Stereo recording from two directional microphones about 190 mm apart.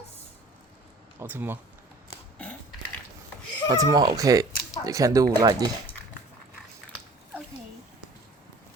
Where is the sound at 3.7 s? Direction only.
20° right (ahead or behind).